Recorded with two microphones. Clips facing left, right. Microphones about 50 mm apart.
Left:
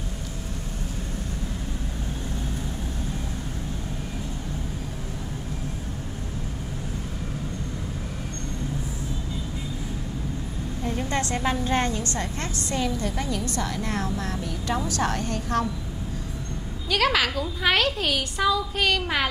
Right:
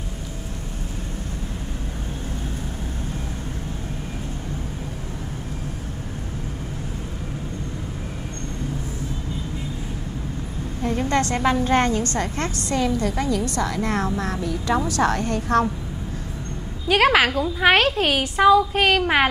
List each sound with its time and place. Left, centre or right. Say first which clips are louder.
11.1 s a woman's voice: right 6 dB; right
16.9 s a woman's voice: right 6 dB; right